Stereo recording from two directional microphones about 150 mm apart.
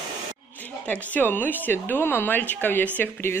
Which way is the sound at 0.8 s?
10° left (ahead or behind).